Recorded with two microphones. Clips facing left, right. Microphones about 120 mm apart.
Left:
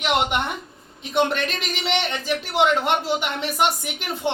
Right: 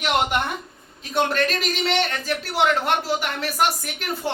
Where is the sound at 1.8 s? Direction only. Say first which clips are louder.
Even; 20° left (ahead or behind).